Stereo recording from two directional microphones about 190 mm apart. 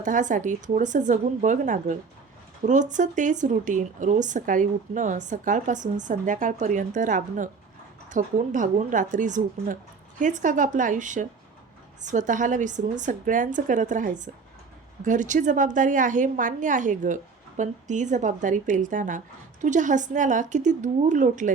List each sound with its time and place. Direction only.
0.0 s a woman's voice: 40° right (ahead or behind)